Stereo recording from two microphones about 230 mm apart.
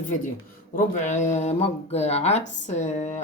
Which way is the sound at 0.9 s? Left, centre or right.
Left.